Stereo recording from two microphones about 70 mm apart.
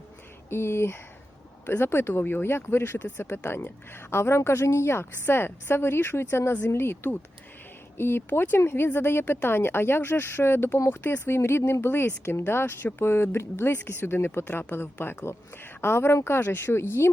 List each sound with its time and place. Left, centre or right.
0.5 s speech: left